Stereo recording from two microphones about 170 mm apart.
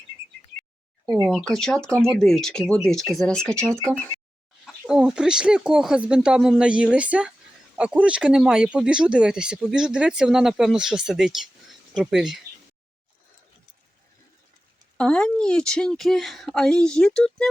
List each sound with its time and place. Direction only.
1.0 s speech: 20° right (ahead or behind)
1.3 s speech: centre (ahead or behind)
14.9 s speech: 5° left (ahead or behind)